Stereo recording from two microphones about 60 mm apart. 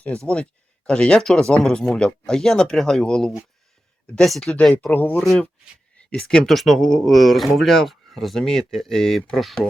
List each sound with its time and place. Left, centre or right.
0.0 s speech: left; by 4.5 s centre
4.9 s speech: left
6.1 s speech: centre